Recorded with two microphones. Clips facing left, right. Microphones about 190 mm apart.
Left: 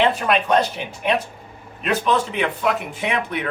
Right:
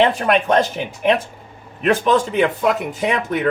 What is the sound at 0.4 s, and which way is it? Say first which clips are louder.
Speech: right 2 dB; 45° right (ahead or behind).